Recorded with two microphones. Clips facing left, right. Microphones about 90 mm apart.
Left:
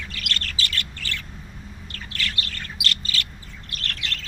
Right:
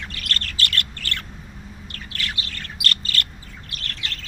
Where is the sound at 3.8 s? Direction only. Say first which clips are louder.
Left 2 dB; 85° left.